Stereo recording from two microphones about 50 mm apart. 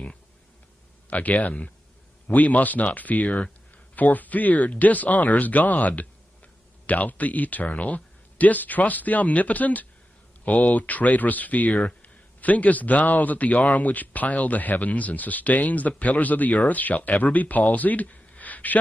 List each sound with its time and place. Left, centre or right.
1.1 s a man's voice: left